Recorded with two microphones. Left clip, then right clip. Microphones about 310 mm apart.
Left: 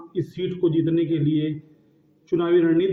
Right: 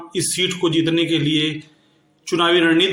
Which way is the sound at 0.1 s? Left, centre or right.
Centre.